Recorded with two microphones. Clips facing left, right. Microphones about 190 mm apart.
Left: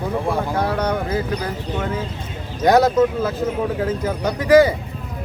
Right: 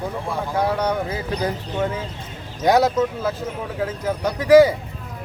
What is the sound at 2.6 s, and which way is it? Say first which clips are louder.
Speech: left 2 dB; 10° right (ahead or behind).